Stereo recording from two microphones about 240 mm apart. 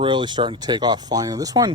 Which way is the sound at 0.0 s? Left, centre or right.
Centre.